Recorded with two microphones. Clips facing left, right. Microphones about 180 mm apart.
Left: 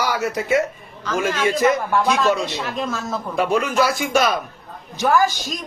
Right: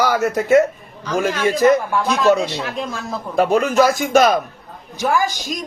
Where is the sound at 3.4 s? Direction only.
45° right (ahead or behind).